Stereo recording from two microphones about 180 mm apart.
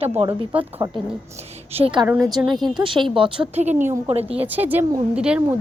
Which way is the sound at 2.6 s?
25° right (ahead or behind).